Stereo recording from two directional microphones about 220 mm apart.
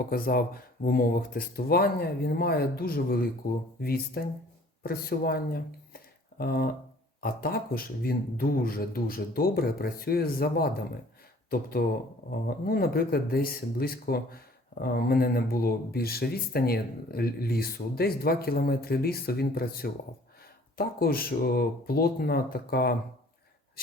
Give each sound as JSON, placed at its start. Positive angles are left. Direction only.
{"t": 0.1, "sound": "speech", "side_deg": 40}
{"t": 12.3, "sound": "speech", "side_deg": 45}